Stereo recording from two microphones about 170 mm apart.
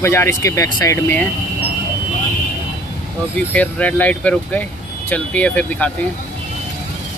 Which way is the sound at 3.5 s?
10° left (ahead or behind).